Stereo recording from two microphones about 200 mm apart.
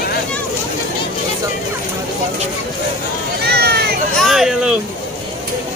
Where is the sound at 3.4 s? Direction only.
55° right (ahead or behind).